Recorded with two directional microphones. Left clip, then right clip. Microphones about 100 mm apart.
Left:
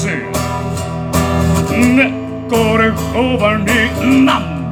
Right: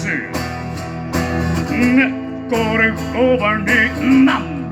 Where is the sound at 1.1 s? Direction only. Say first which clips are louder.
Left 5 dB; 20° left (ahead or behind).